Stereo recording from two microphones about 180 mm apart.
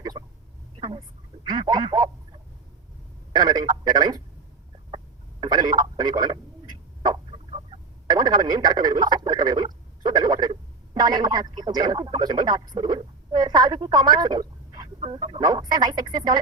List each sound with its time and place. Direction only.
0.8 s a sound: 30° right (ahead or behind)
1.5 s speech: 25° right (ahead or behind)
3.3 s speech: 25° right (ahead or behind)
5.4 s speech: 25° right (ahead or behind)